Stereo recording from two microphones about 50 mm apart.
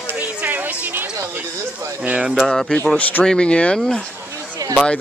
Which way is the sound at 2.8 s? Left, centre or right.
Left.